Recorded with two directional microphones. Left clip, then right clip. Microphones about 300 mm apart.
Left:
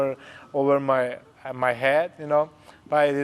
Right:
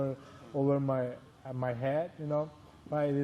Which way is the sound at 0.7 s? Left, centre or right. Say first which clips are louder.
Left 11 dB; centre.